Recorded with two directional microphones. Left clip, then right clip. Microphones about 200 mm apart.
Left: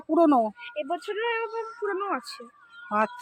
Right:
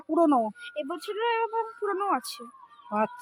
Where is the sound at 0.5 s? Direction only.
50° right (ahead or behind).